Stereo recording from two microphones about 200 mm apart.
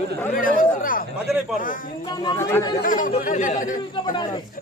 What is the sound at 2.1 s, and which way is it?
Speech, 20° left (ahead or behind).